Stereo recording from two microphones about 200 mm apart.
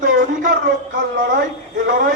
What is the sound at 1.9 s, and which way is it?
Speech, 45° right (ahead or behind).